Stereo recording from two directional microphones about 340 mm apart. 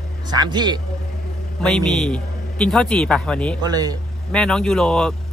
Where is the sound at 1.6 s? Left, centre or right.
Centre.